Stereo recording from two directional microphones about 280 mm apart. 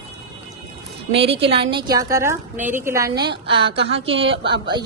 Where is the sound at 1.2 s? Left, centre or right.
Right.